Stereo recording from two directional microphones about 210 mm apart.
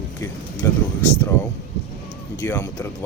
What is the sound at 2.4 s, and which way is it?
Speech, 15° left (ahead or behind).